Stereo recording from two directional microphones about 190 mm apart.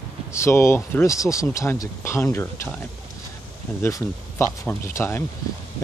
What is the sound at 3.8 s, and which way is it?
Speech, 15° left (ahead or behind).